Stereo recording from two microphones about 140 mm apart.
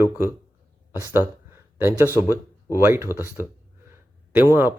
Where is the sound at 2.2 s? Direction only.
15° right (ahead or behind).